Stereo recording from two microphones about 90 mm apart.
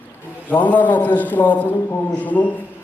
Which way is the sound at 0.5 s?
20° left (ahead or behind).